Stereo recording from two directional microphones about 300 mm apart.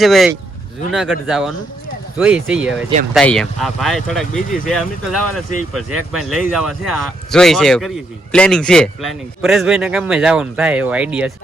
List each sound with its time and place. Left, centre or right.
0.0 s speech: centre
4.4 s speech: left
4.7 s speech: centre